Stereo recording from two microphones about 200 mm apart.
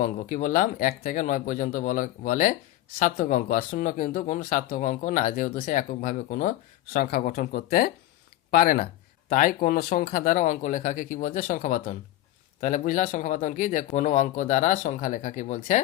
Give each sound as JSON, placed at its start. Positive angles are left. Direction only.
{"t": 0.0, "sound": "speech", "side_deg": 40}